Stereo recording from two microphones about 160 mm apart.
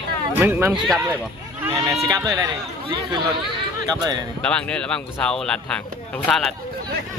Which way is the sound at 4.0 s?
25° right (ahead or behind).